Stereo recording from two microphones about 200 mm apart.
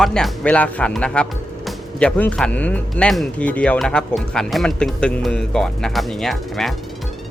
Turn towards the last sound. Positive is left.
turn(degrees=0)  # may be behind; listen again after turning